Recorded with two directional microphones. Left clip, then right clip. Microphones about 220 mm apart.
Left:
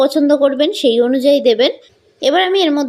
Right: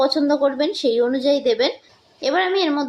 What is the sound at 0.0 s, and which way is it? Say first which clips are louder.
Speech: left 6 dB; 30° left (ahead or behind).